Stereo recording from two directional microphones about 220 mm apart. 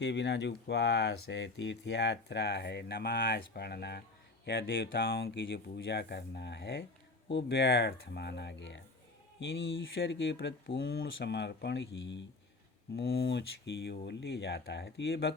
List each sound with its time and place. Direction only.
0.0 s speech: 50° left (ahead or behind)